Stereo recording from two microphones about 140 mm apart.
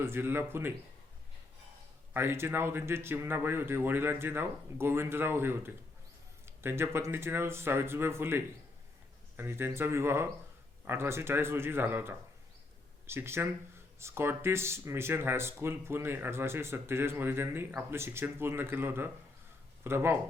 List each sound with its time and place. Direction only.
0.0 s speech: 15° right (ahead or behind)
2.1 s speech: 15° right (ahead or behind)
9.4 s speech: 15° right (ahead or behind)